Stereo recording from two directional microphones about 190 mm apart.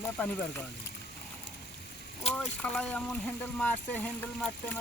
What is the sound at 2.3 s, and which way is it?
Speech, 5° left (ahead or behind).